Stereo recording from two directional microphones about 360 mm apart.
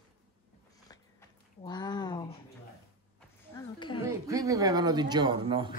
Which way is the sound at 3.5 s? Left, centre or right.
Centre.